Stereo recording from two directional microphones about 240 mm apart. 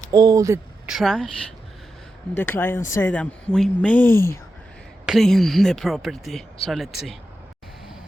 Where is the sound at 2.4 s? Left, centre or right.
Centre.